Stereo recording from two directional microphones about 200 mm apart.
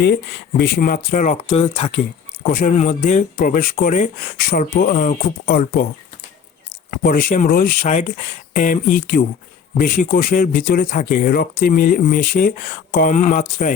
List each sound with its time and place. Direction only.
0.0 s speech: 55° left (ahead or behind); by 2.0 s 30° left (ahead or behind)
2.5 s speech: 40° left (ahead or behind)
7.0 s speech: 45° left (ahead or behind)